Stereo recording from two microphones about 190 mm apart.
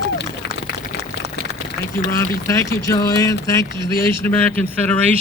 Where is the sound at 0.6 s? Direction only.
60° left (ahead or behind).